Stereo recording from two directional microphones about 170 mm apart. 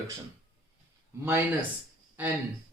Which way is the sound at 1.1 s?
15° right (ahead or behind).